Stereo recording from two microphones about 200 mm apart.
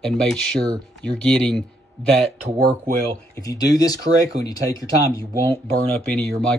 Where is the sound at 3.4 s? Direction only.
20° left (ahead or behind).